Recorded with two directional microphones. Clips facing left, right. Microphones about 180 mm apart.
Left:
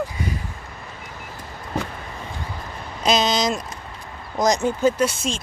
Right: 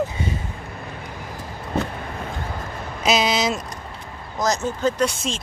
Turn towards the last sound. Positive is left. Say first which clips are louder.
# left 2 dB
turn(degrees=0)  # may be behind; listen again after turning